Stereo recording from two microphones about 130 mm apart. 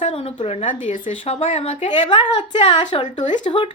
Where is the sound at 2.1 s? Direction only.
35° left (ahead or behind).